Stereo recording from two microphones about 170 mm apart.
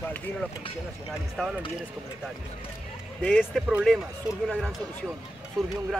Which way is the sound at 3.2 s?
10° left (ahead or behind).